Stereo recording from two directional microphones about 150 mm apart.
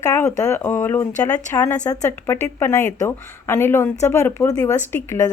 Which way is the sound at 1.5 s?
25° left (ahead or behind).